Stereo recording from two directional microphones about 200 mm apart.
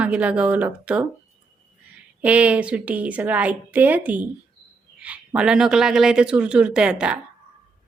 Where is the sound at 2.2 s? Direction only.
5° right (ahead or behind).